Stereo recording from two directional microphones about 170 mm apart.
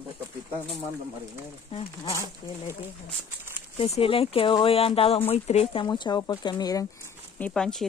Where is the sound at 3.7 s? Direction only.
35° left (ahead or behind).